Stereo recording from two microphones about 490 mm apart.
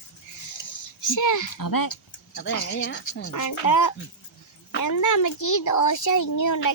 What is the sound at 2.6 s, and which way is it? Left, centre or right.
A child's voice, left.